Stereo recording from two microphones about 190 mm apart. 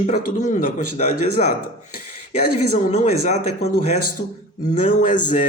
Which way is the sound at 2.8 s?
40° left (ahead or behind).